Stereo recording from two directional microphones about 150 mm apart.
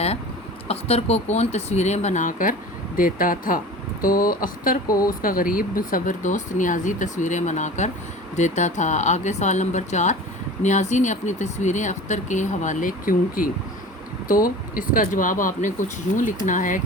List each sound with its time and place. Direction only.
0.7 s speech: 45° left (ahead or behind); by 16.8 s 60° left (ahead or behind)